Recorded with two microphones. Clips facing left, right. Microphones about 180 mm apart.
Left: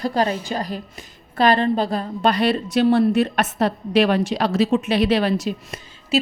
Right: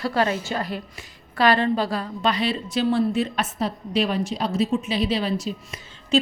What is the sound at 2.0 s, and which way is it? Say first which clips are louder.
A woman's voice: left 4 dB; 50° left (ahead or behind).